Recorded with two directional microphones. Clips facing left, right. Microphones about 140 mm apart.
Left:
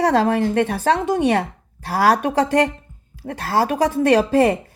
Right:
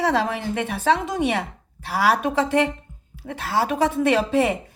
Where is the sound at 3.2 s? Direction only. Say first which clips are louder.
Left 3 dB; 45° left (ahead or behind).